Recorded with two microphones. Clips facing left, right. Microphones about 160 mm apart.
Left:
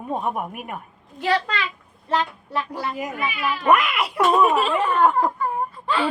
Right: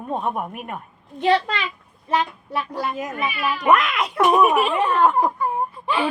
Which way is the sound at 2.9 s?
10° left (ahead or behind).